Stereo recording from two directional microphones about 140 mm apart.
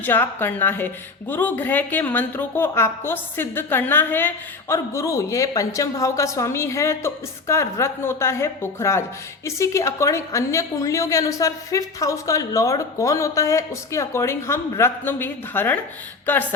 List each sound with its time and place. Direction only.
0.0 s a woman's voice: 15° left (ahead or behind)